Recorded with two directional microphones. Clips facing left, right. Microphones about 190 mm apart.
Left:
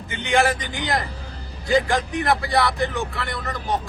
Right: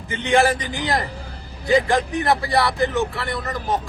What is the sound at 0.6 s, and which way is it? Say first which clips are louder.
Speech: right 2 dB; 30° right (ahead or behind).